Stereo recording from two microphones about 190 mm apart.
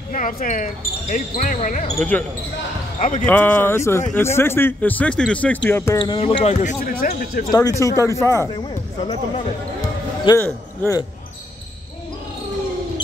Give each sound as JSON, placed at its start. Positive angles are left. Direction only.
{"t": 0.1, "sound": "speech", "side_deg": 45}
{"t": 2.0, "sound": "a man's voice", "side_deg": 10}
{"t": 3.0, "sound": "speech", "side_deg": 40}
{"t": 3.3, "sound": "a man's voice", "side_deg": 10}
{"t": 5.9, "sound": "speech", "side_deg": 25}
{"t": 7.8, "sound": "a man's voice", "side_deg": 15}
{"t": 10.2, "sound": "a man's voice", "side_deg": 10}